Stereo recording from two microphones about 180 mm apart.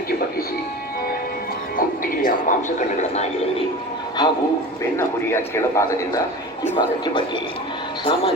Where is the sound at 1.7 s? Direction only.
50° left (ahead or behind).